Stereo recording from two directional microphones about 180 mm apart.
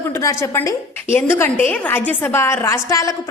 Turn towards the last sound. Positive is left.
turn(degrees=15)  # may be behind; listen again after turning